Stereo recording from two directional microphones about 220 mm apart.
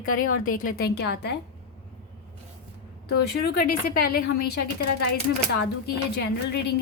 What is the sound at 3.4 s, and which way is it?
A woman's voice, 40° left (ahead or behind).